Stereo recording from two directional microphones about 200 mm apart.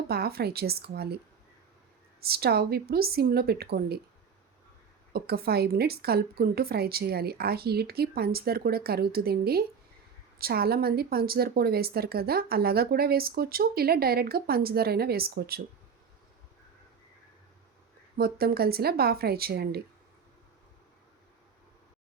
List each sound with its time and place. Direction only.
0.1 s a woman's voice: 50° right (ahead or behind)
2.2 s a woman's voice: 50° right (ahead or behind)
5.1 s a woman's voice: 50° right (ahead or behind)
18.2 s a woman's voice: 50° right (ahead or behind)